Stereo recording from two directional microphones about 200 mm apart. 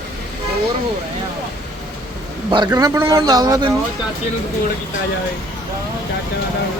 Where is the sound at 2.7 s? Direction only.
15° right (ahead or behind).